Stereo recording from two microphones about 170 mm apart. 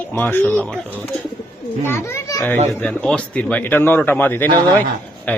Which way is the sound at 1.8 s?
15° left (ahead or behind).